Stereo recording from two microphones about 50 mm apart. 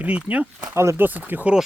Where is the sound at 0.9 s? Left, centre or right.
Right.